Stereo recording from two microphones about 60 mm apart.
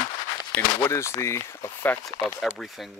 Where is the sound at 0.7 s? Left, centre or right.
Left.